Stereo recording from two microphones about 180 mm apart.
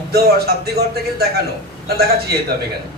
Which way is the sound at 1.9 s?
60° right (ahead or behind).